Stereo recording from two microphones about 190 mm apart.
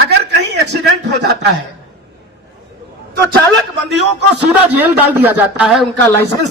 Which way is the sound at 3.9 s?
65° right (ahead or behind).